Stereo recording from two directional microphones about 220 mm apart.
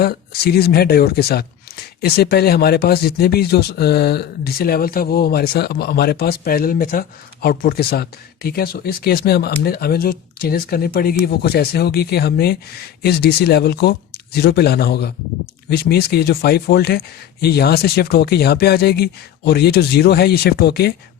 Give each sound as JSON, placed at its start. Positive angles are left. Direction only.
{"t": 0.0, "sound": "speech", "side_deg": 45}